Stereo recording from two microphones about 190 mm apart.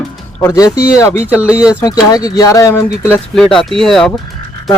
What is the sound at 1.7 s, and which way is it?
Speech, 20° left (ahead or behind).